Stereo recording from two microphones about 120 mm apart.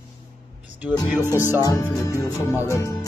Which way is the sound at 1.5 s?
30° left (ahead or behind).